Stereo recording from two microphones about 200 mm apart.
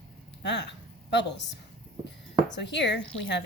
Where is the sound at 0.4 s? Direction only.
60° left (ahead or behind).